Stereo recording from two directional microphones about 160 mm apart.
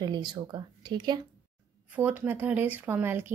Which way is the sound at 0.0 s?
25° right (ahead or behind).